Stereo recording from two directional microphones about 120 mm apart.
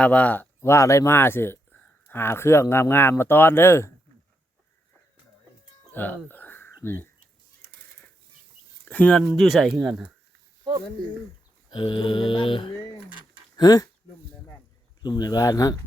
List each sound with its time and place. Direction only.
0.0 s speech: 10° left (ahead or behind)
5.9 s a sound: 15° left (ahead or behind)
6.8 s speech: 20° left (ahead or behind)
8.8 s speech: 10° left (ahead or behind)
11.7 s speech: 45° left (ahead or behind)
15.0 s speech: 35° left (ahead or behind)